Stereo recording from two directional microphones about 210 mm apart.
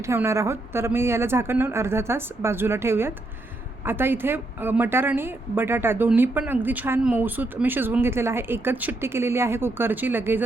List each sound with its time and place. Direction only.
0.0 s a woman's voice: 15° right (ahead or behind)